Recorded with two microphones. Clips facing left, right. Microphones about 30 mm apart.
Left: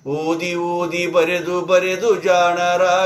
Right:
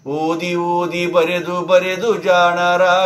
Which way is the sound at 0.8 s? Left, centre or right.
Right.